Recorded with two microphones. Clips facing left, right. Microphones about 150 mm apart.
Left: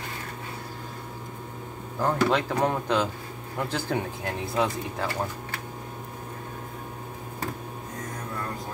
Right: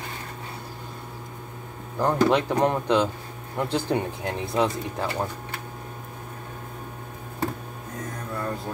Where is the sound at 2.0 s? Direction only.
15° right (ahead or behind).